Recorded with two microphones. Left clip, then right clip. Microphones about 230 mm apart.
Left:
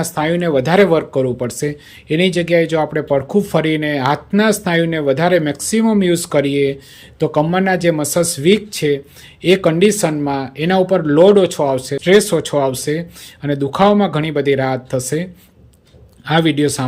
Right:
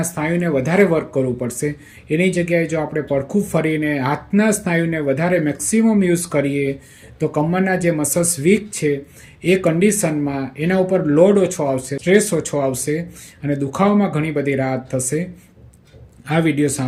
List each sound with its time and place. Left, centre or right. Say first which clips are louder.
0.0 s speech: left 4 dB; centre